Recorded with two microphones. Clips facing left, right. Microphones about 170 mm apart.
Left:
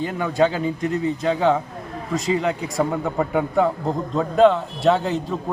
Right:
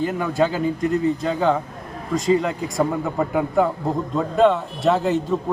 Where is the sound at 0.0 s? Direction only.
Centre (ahead or behind).